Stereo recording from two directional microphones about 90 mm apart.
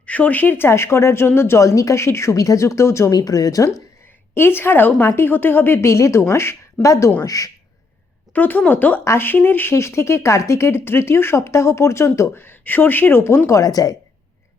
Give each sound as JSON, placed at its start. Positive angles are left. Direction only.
{"t": 0.0, "sound": "speech", "side_deg": 15}
{"t": 3.1, "sound": "speech", "side_deg": 45}
{"t": 4.4, "sound": "speech", "side_deg": 25}
{"t": 8.3, "sound": "speech", "side_deg": 20}